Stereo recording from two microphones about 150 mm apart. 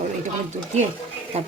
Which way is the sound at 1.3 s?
45° right (ahead or behind).